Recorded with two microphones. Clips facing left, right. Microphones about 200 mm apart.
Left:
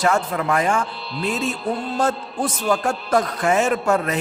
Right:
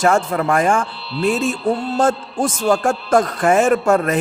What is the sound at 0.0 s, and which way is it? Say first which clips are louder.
A man's voice: right 4 dB; 50° right (ahead or behind).